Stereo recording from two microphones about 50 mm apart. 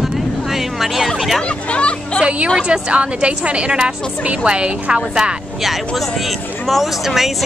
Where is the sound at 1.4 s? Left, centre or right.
Left.